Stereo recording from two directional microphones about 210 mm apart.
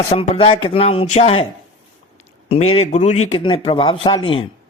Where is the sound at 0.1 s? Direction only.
25° left (ahead or behind).